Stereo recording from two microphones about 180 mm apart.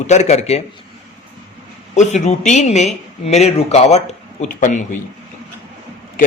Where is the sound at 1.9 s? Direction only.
40° left (ahead or behind).